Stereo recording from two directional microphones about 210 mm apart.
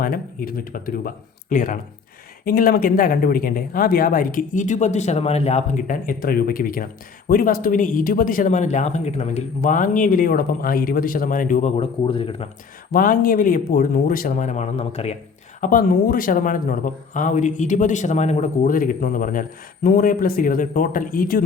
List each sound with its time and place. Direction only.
0.0 s speech: 45° left (ahead or behind); by 12.5 s 25° left (ahead or behind)
12.9 s speech: 40° left (ahead or behind)
15.6 s speech: 45° left (ahead or behind)